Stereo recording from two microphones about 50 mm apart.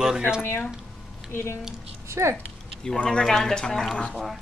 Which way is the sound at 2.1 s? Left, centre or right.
Right.